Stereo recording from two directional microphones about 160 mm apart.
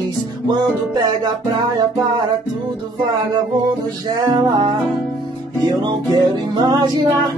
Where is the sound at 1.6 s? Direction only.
25° right (ahead or behind).